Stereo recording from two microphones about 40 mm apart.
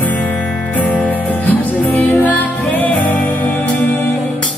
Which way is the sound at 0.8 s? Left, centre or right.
Left.